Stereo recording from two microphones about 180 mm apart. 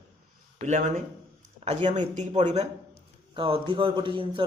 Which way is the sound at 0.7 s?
40° right (ahead or behind).